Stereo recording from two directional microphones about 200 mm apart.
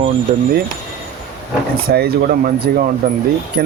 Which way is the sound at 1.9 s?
50° right (ahead or behind).